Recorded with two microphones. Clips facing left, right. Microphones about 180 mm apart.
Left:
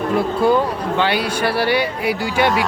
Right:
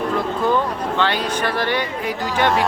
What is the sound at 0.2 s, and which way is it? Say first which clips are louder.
Speech: left 5 dB; 10° left (ahead or behind).